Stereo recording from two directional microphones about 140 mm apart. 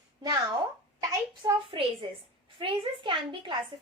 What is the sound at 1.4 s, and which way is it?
A woman's voice, 40° right (ahead or behind).